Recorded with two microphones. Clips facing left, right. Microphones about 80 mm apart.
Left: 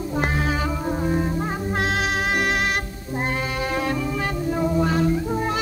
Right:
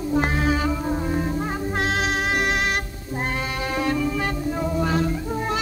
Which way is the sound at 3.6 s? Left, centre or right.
Centre.